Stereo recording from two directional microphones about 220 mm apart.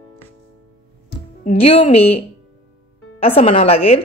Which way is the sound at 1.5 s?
30° left (ahead or behind).